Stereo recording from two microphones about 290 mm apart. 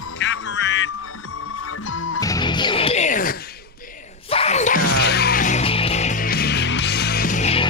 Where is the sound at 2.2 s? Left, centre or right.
Centre.